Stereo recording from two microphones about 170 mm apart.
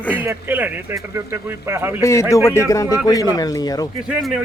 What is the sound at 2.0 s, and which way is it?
Speech, 15° left (ahead or behind).